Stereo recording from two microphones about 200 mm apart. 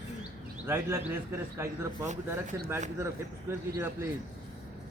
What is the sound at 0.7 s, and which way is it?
A man's voice, 10° right (ahead or behind).